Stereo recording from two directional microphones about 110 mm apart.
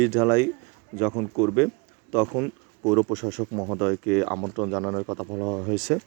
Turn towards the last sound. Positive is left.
turn(degrees=-5)  # may be behind; listen again after turning